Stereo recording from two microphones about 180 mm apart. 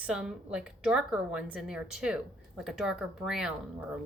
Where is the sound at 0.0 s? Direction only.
5° right (ahead or behind).